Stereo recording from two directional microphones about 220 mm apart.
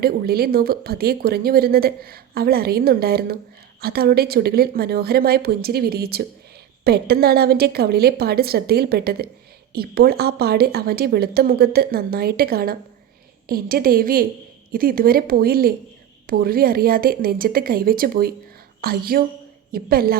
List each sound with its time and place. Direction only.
0.0 s a woman's voice: 45° right (ahead or behind)